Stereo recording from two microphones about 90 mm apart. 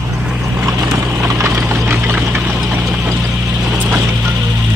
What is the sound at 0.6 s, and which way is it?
Clip-clop, 30° right (ahead or behind).